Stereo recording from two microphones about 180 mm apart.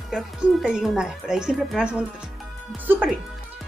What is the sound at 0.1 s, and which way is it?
A child's voice, centre (ahead or behind).